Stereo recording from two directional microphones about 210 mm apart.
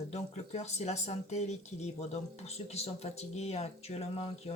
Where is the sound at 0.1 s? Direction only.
30° left (ahead or behind).